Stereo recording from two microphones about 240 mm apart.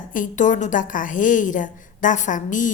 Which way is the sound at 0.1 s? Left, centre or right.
Left.